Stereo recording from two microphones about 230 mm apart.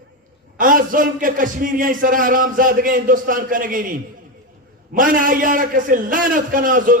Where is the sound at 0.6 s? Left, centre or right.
Right.